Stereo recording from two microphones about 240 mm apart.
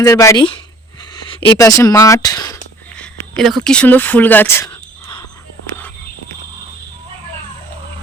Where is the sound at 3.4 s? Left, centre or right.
Centre.